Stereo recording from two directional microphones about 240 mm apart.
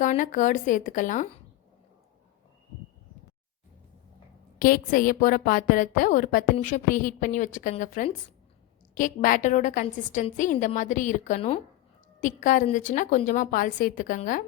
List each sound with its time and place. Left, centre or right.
0.0 s a woman's voice: left
4.6 s a woman's voice: left